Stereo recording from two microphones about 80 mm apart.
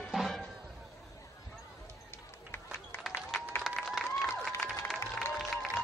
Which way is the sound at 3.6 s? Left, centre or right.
Centre.